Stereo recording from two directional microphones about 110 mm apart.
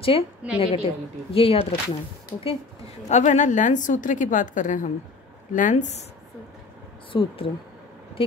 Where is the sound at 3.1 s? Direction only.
90° left.